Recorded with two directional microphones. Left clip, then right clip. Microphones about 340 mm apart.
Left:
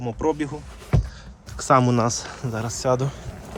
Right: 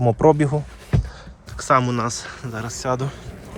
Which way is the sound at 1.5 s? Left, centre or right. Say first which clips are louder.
Even; centre.